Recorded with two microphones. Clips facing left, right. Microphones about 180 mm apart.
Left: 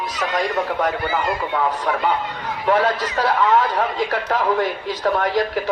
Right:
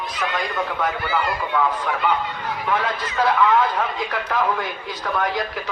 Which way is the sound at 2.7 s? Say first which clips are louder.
Left 7 dB; 45° left (ahead or behind).